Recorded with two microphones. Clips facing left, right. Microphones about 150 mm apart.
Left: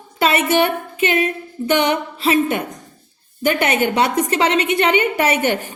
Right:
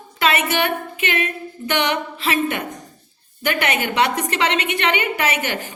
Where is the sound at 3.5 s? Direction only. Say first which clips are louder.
Left 4 dB; 40° left (ahead or behind).